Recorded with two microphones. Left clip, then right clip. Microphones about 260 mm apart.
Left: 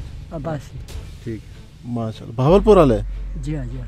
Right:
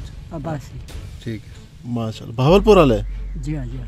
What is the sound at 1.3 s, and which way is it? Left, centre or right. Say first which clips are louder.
Speech: even; right.